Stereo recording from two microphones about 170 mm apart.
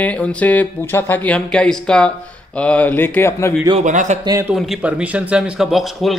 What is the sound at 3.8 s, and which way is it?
Speech, 45° right (ahead or behind).